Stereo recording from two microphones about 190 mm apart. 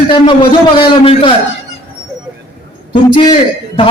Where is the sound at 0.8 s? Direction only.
25° left (ahead or behind).